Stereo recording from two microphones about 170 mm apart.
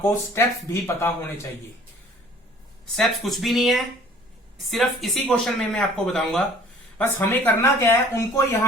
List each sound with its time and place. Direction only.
0.0 s speech: 15° left (ahead or behind)
2.9 s speech: centre (ahead or behind)
7.2 s speech: 15° left (ahead or behind)